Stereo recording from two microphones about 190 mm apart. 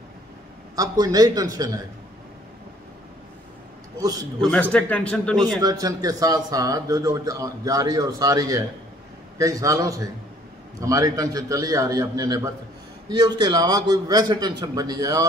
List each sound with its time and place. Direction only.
0.7 s speech: 20° right (ahead or behind)
4.0 s speech: 20° right (ahead or behind)
4.4 s a man's voice: 5° left (ahead or behind)
5.6 s a man's voice: 20° right (ahead or behind)